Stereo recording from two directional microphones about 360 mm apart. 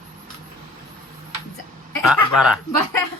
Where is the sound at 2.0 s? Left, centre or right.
Centre.